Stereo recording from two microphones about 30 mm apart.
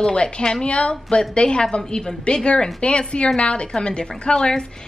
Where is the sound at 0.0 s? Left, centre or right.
Left.